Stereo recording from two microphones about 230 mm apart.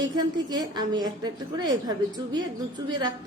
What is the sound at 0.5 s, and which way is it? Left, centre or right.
A woman's voice, centre.